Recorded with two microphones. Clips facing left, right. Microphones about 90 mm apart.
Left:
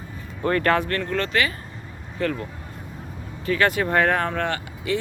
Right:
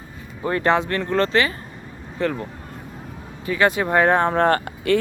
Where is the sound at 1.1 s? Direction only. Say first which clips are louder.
Right 6 dB; 30° right (ahead or behind).